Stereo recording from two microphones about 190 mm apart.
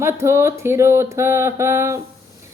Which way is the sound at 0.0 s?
15° right (ahead or behind).